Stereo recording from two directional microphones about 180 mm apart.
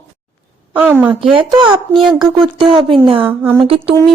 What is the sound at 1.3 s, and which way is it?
Speech, 30° right (ahead or behind).